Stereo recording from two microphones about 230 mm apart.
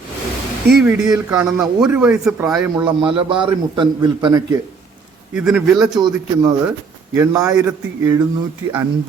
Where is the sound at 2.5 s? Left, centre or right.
Centre.